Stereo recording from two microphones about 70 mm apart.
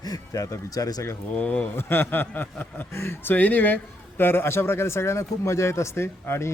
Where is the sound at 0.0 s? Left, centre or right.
Left.